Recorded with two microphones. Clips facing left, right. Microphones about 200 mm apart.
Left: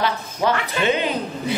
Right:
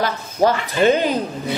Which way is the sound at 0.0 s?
40° right (ahead or behind).